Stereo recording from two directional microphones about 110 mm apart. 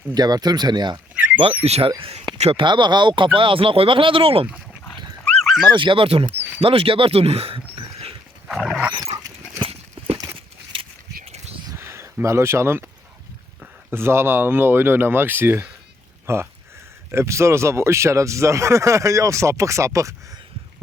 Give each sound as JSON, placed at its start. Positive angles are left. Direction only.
{"t": 0.1, "sound": "speech", "side_deg": -35}
{"t": 1.1, "sound": "a sound", "side_deg": -15}
{"t": 1.4, "sound": "speech", "side_deg": -65}
{"t": 2.6, "sound": "speech", "side_deg": -45}
{"t": 4.4, "sound": "dog", "side_deg": -10}
{"t": 5.6, "sound": "speech", "side_deg": -45}
{"t": 8.4, "sound": "dog", "side_deg": -5}
{"t": 9.1, "sound": "dog", "side_deg": -25}
{"t": 10.3, "sound": "a sound", "side_deg": -50}
{"t": 11.7, "sound": "a sound", "side_deg": -25}
{"t": 13.9, "sound": "speech", "side_deg": -20}